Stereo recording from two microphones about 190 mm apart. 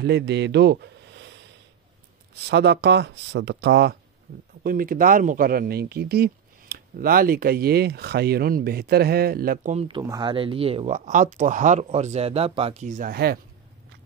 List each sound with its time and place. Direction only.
0.0 s speech: 60° right (ahead or behind)
2.3 s speech: 60° right (ahead or behind)
4.6 s speech: 50° right (ahead or behind)
9.8 s speech: 20° right (ahead or behind); by 13.1 s 40° right (ahead or behind)
13.1 s speech: 55° right (ahead or behind)